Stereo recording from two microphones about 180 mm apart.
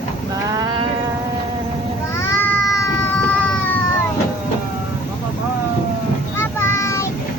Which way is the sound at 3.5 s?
10° left (ahead or behind).